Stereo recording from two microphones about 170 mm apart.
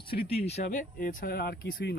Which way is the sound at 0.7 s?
50° left (ahead or behind).